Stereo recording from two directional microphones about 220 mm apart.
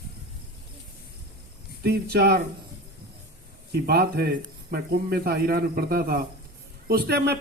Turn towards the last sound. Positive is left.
turn(degrees=-45)  # may be behind; listen again after turning